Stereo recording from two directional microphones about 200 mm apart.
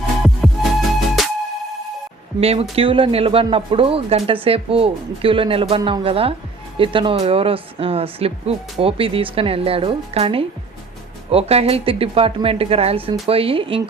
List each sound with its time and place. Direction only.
0.2 s music: centre (ahead or behind)
2.4 s speech: 30° right (ahead or behind)